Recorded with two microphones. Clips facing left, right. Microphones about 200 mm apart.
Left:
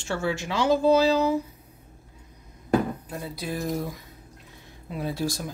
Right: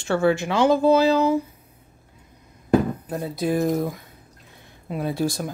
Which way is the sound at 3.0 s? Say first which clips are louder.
Right 8 dB; 50° right (ahead or behind).